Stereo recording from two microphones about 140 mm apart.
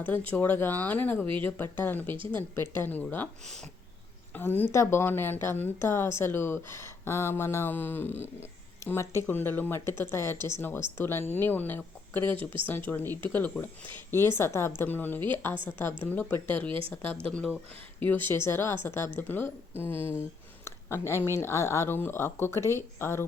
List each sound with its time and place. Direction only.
0.0 s a woman's voice: 10° left (ahead or behind)
4.4 s a woman's voice: 15° left (ahead or behind)
20.7 s a sound: 20° left (ahead or behind)
21.2 s a woman's voice: 20° left (ahead or behind)